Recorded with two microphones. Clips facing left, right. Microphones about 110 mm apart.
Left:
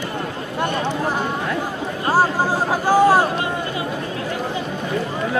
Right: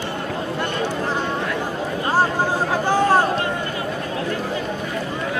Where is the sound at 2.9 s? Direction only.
10° left (ahead or behind).